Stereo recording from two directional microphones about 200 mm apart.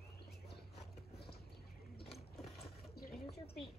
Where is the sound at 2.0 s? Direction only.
Centre (ahead or behind).